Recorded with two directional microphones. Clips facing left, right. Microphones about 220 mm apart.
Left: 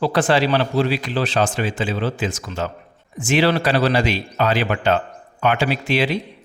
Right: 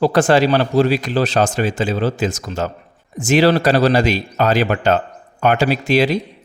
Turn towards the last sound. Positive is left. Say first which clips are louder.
# right 5 dB
turn(degrees=-40)  # may be behind; listen again after turning